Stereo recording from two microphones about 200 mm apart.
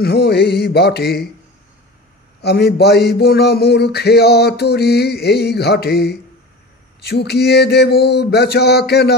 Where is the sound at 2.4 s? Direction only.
55° left (ahead or behind).